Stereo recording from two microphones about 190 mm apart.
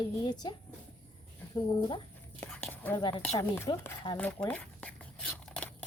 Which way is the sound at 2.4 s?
10° left (ahead or behind).